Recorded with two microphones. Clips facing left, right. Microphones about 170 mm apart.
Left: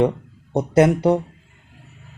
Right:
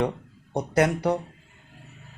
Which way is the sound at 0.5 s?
25° left (ahead or behind).